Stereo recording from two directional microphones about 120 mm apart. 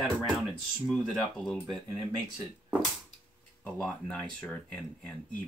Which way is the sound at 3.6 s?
10° left (ahead or behind).